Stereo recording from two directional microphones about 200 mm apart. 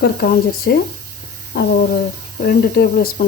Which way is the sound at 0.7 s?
55° left (ahead or behind).